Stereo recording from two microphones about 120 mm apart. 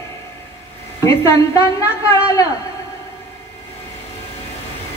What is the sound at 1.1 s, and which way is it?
Speech, 20° left (ahead or behind).